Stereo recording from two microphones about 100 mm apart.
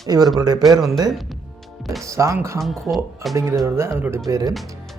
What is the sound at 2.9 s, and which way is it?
Speech, 15° right (ahead or behind).